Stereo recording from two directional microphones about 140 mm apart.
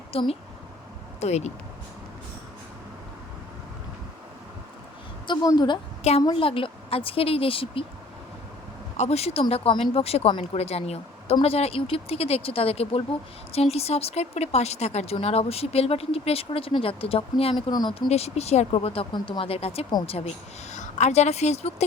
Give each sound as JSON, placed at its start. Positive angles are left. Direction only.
{"t": 0.1, "sound": "speech", "side_deg": 45}
{"t": 5.3, "sound": "a woman's voice", "side_deg": 30}
{"t": 6.0, "sound": "a woman's voice", "side_deg": 50}
{"t": 9.0, "sound": "speech", "side_deg": 50}
{"t": 17.7, "sound": "a woman's voice", "side_deg": 30}
{"t": 18.1, "sound": "speech", "side_deg": 50}